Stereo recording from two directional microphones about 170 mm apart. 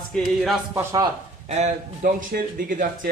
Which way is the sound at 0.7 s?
20° right (ahead or behind).